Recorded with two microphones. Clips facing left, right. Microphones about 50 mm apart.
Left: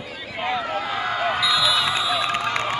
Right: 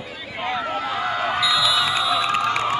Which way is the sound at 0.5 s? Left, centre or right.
Centre.